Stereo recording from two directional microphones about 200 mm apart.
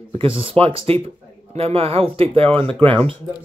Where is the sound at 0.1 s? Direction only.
25° right (ahead or behind).